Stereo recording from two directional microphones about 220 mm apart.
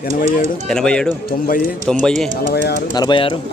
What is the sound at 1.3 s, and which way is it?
Speech, 40° left (ahead or behind).